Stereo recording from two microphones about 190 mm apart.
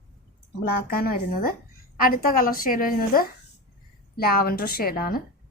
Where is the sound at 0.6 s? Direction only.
55° left (ahead or behind).